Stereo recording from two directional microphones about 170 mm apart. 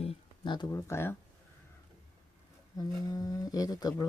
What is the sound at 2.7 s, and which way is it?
Speech, 20° left (ahead or behind).